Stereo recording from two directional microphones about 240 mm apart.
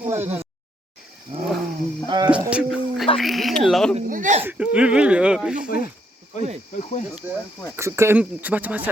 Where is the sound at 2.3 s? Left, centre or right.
Centre.